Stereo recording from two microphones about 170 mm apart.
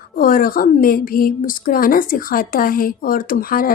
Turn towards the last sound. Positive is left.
turn(degrees=60)  # may be behind; listen again after turning